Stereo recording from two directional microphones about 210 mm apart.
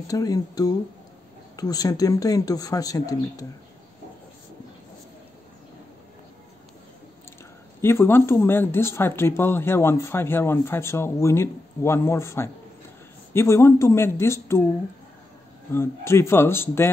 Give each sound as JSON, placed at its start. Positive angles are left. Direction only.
{"t": 0.1, "sound": "speech", "side_deg": 15}
{"t": 7.8, "sound": "speech", "side_deg": 10}
{"t": 15.7, "sound": "speech", "side_deg": 10}